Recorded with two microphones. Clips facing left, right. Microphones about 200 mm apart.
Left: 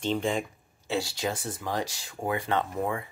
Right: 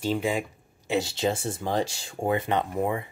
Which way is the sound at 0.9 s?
20° right (ahead or behind).